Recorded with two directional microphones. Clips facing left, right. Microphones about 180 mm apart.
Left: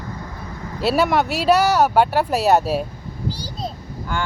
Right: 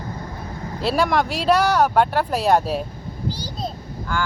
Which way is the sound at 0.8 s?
5° left (ahead or behind).